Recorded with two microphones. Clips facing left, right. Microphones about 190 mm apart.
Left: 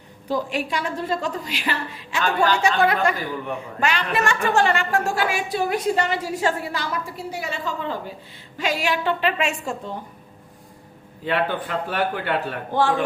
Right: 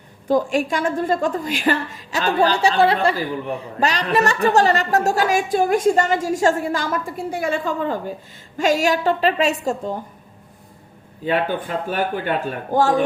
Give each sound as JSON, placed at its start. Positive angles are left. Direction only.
{"t": 0.3, "sound": "a woman's voice", "side_deg": -45}
{"t": 11.3, "sound": "a man's voice", "side_deg": -40}